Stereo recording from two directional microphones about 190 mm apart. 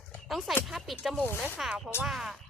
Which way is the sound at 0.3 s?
Centre (ahead or behind).